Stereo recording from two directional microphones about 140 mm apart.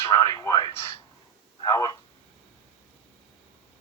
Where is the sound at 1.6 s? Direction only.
25° left (ahead or behind).